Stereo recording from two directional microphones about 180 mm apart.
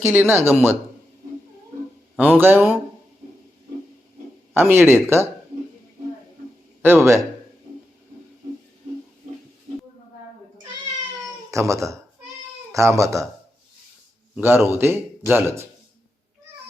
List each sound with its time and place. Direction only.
0.0 s a man's voice: 10° right (ahead or behind)
2.1 s a man's voice: 10° right (ahead or behind)
4.5 s a man's voice: 15° right (ahead or behind)
6.8 s a man's voice: 15° right (ahead or behind)
11.7 s a man's voice: 15° right (ahead or behind)
14.3 s a man's voice: 10° right (ahead or behind)